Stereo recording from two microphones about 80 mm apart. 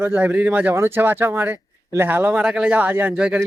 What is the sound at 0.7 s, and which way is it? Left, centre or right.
Speech, right.